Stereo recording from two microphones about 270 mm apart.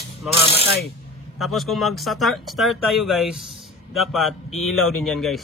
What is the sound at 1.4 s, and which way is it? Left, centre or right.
Speech, centre.